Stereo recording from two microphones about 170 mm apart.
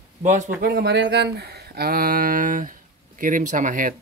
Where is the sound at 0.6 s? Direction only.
65° right (ahead or behind).